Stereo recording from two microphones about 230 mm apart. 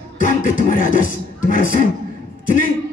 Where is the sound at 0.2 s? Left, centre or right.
Left.